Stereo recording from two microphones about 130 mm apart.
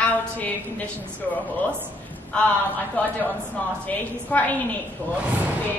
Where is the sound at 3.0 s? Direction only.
10° left (ahead or behind).